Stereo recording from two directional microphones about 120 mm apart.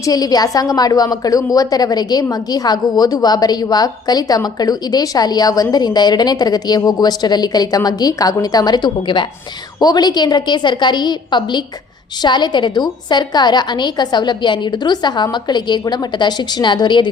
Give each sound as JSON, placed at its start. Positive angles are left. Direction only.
{"t": 0.0, "sound": "a woman's voice", "side_deg": 30}